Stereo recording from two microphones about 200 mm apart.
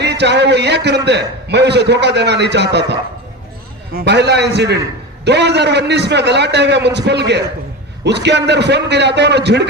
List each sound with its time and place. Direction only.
0.0 s a man's voice: 60° right (ahead or behind)